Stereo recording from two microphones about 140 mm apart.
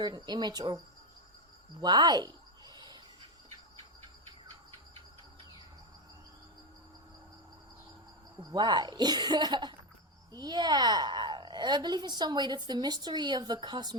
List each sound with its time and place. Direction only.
0.0 s a woman's voice: 30° right (ahead or behind)
1.8 s a sound: 30° right (ahead or behind)
8.4 s a woman's voice: 30° right (ahead or behind)